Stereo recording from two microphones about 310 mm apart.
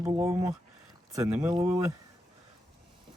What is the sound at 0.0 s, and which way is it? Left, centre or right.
Speech, centre.